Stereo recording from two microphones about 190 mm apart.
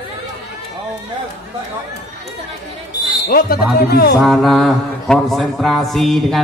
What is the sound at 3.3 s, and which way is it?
Speech, 50° left (ahead or behind).